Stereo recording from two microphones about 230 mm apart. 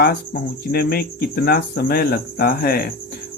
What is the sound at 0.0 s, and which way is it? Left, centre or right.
Speech, left.